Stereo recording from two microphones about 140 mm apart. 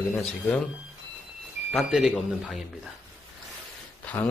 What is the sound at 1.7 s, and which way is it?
Speech, centre (ahead or behind).